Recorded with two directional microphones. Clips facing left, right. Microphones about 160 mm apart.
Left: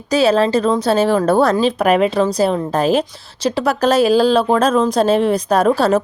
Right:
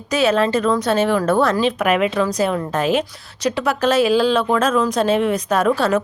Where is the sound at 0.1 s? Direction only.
35° left (ahead or behind).